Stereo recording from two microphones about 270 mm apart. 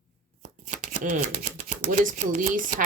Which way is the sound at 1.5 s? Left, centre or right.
Right.